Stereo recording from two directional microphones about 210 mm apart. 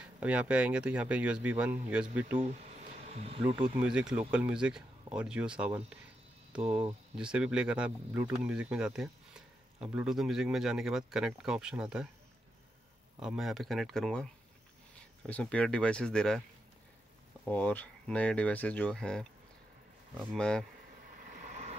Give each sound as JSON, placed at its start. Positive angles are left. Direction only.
{"t": 0.0, "sound": "speech", "side_deg": -5}
{"t": 2.3, "sound": "speech", "side_deg": -30}
{"t": 3.8, "sound": "speech", "side_deg": -5}
{"t": 13.2, "sound": "speech", "side_deg": 0}
{"t": 17.5, "sound": "speech", "side_deg": 10}
{"t": 21.3, "sound": "vehicle", "side_deg": -35}